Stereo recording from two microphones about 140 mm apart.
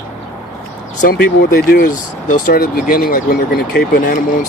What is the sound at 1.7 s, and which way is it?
Speech, 75° left (ahead or behind).